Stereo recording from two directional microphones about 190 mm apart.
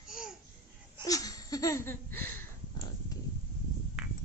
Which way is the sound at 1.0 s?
20° left (ahead or behind).